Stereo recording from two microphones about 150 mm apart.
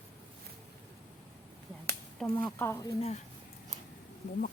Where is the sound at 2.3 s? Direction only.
15° left (ahead or behind).